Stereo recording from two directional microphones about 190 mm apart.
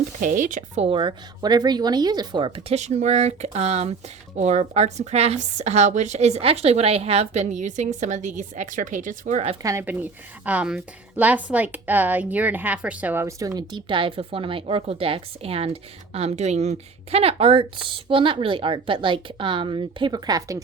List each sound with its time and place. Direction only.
0.2 s speech: 45° right (ahead or behind)
0.9 s a woman's voice: 25° right (ahead or behind)
9.6 s a woman's voice: 10° right (ahead or behind)